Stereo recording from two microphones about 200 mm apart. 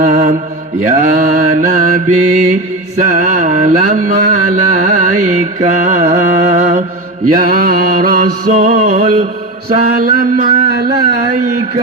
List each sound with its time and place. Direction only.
0.0 s mantra: 40° right (ahead or behind)
3.0 s a sound: 40° right (ahead or behind)
5.8 s carnatic music: 40° right (ahead or behind)
7.3 s mantra: 45° right (ahead or behind)
8.5 s a sound: 35° right (ahead or behind)
9.9 s carnatic music: 45° right (ahead or behind)